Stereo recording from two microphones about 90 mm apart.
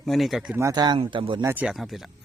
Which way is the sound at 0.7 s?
50° right (ahead or behind).